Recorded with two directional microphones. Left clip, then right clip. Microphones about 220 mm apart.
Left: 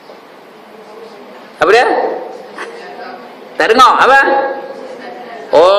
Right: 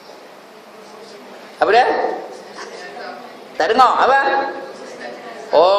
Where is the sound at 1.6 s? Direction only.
15° left (ahead or behind).